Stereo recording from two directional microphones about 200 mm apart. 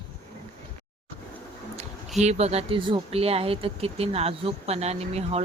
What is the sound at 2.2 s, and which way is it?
Speech, 35° right (ahead or behind).